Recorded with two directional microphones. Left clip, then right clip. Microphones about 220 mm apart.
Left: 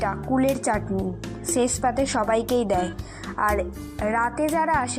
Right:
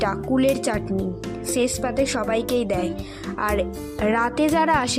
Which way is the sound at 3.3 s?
25° right (ahead or behind).